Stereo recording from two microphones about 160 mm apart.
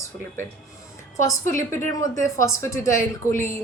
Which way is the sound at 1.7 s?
15° left (ahead or behind).